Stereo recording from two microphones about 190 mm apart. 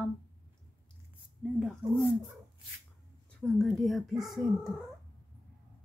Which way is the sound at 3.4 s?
5° left (ahead or behind).